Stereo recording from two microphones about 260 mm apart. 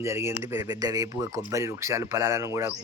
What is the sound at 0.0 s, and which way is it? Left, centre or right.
Speech, centre.